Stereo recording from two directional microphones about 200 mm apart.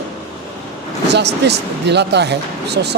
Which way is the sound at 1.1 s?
55° right (ahead or behind).